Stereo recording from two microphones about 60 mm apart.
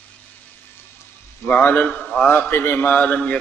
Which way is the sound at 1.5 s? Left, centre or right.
Left.